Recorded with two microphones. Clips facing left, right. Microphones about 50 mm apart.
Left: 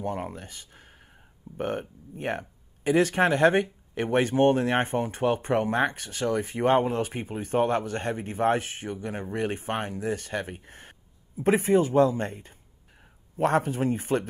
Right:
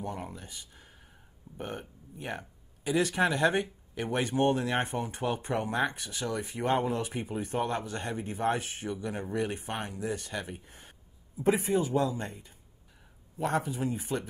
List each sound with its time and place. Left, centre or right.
0.0 s a man's voice: left